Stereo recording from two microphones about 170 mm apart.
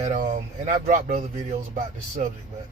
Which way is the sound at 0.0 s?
45° right (ahead or behind).